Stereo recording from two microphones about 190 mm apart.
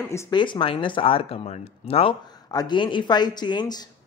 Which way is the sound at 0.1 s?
15° left (ahead or behind).